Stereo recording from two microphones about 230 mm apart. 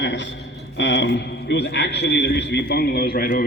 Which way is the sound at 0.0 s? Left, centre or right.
Left.